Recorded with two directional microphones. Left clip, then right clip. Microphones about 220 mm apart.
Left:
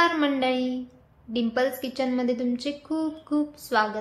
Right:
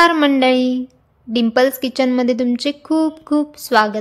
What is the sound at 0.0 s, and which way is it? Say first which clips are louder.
A woman's voice: right 10 dB; 50° right (ahead or behind).